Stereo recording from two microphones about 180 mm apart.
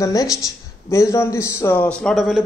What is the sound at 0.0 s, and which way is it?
A woman's voice, 20° left (ahead or behind).